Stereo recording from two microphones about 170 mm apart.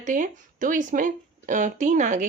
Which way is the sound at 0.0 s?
50° right (ahead or behind).